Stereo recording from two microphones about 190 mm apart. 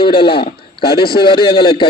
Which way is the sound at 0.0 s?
25° left (ahead or behind).